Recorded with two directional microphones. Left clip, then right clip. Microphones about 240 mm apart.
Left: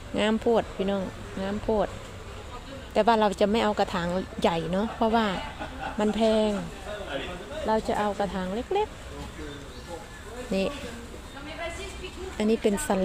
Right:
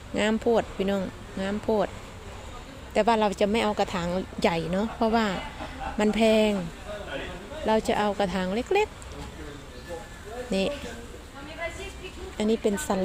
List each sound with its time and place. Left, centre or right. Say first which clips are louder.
0.2 s speech: even; centre
2.9 s speech: left 1 dB; centre
7.7 s speech: right 2 dB; centre
10.5 s speech: even; centre
12.4 s speech: left 1 dB; centre